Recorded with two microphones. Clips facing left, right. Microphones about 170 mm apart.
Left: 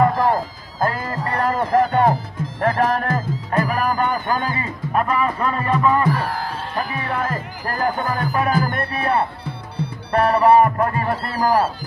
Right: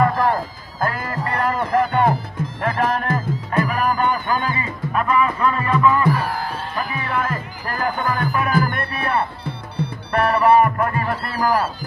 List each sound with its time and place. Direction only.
0.0 s music: 20° left (ahead or behind)
0.8 s speech: 30° left (ahead or behind)
2.6 s music: 45° left (ahead or behind)
2.9 s speech: 40° left (ahead or behind)
6.1 s music: centre (ahead or behind)
6.7 s music: 35° left (ahead or behind)
10.1 s speech: 25° left (ahead or behind)